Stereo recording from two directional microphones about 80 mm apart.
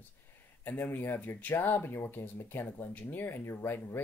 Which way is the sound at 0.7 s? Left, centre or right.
Left.